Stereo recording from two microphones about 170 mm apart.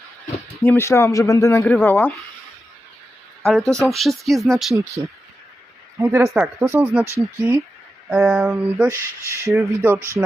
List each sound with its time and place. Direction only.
0.6 s speech: 10° left (ahead or behind)
3.4 s speech: centre (ahead or behind)
5.0 s speech: 15° right (ahead or behind)
8.1 s speech: 5° right (ahead or behind)